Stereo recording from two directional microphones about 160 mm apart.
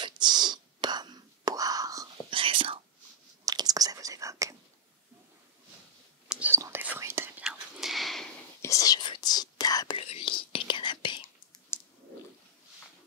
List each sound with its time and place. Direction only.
0.0 s whispering: 25° right (ahead or behind)
2.3 s whispering: 35° right (ahead or behind)
3.4 s whispering: 25° right (ahead or behind)
6.2 s whispering: 5° right (ahead or behind)
6.5 s whispering: 15° right (ahead or behind)
7.4 s whispering: centre (ahead or behind)
8.6 s whispering: 20° left (ahead or behind)
9.9 s whispering: 35° left (ahead or behind)
11.7 s a sound: 15° left (ahead or behind)